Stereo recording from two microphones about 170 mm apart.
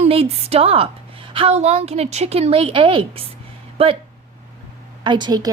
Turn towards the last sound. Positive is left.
turn(degrees=-25)  # may be behind; listen again after turning